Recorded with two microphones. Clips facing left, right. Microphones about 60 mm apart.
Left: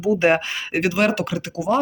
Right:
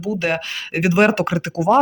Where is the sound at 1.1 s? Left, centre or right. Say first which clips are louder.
Right 4 dB; right.